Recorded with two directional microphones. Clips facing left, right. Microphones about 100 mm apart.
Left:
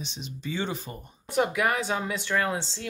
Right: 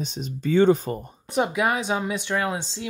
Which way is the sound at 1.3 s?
20° right (ahead or behind).